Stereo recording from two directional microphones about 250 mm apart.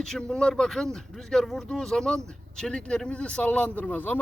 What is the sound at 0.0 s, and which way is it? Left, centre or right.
Speech, centre.